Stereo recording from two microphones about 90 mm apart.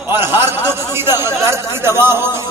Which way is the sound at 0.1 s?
25° right (ahead or behind).